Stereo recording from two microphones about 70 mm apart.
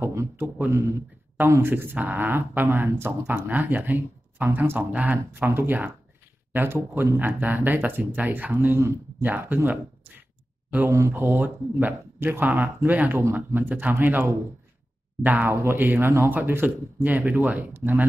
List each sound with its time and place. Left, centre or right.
0.0 s speech: right
0.7 s speech: right
5.3 s speech: right
8.7 s speech: right
9.2 s speech: right
10.9 s speech: right